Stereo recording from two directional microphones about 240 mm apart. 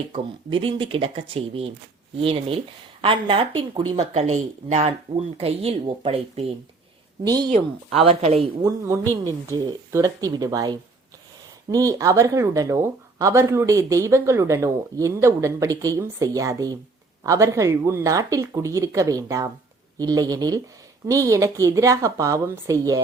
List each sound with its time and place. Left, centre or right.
0.1 s speech: right
9.5 s speech: centre